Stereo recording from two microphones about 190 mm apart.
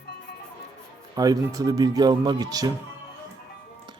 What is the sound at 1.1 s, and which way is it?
Speech, 20° right (ahead or behind).